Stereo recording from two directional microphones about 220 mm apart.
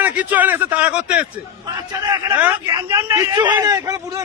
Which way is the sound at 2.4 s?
10° right (ahead or behind).